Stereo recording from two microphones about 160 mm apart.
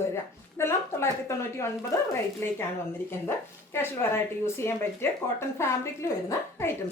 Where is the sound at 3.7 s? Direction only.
15° left (ahead or behind).